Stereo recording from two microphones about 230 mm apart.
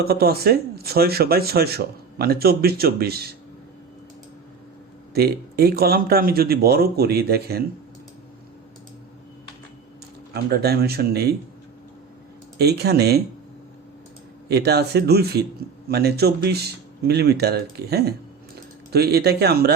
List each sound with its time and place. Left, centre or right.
0.0 s speech: right
5.1 s speech: right
10.3 s speech: right
12.5 s speech: right
14.4 s speech: right